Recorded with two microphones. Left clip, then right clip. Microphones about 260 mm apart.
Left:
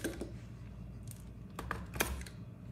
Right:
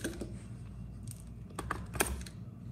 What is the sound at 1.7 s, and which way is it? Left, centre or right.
Typing, centre.